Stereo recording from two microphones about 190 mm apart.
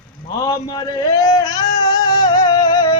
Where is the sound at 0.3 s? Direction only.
20° left (ahead or behind).